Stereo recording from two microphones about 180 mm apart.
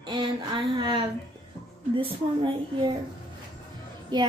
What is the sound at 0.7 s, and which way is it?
A woman's voice, 25° right (ahead or behind).